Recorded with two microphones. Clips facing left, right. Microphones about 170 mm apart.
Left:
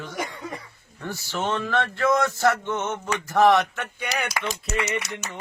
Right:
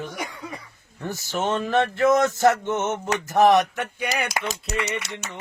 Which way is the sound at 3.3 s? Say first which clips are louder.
Right 1 dB; 20° right (ahead or behind).